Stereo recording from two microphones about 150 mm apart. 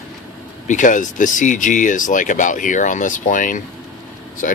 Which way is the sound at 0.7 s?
60° left (ahead or behind).